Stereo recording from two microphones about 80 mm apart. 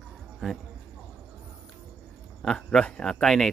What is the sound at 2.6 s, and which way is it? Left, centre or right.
Speech, centre.